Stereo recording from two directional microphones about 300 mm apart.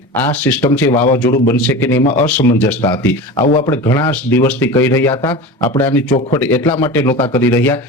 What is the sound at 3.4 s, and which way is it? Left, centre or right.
Speech, left.